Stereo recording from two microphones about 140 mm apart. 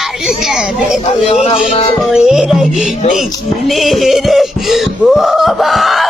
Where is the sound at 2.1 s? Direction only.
5° right (ahead or behind).